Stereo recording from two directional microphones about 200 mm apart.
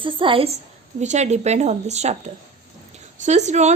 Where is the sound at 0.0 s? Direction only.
25° right (ahead or behind).